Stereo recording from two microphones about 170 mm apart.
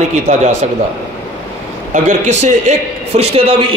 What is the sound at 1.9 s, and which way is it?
Speech, 45° right (ahead or behind).